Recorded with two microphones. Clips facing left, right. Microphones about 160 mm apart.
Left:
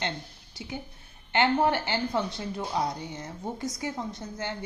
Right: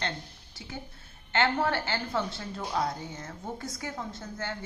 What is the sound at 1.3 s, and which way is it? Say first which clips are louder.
A woman's voice: left 3 dB; 15° left (ahead or behind).